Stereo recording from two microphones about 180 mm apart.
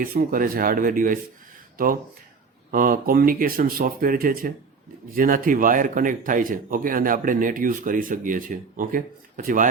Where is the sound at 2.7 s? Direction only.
50° right (ahead or behind).